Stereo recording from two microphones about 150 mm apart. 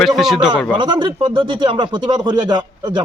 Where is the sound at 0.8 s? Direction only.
30° right (ahead or behind).